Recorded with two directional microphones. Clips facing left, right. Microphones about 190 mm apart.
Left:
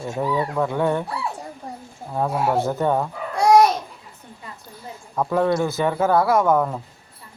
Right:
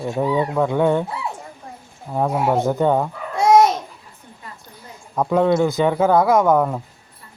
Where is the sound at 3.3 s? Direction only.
25° right (ahead or behind).